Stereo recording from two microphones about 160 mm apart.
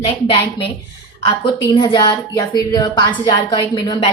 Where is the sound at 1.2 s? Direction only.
30° left (ahead or behind).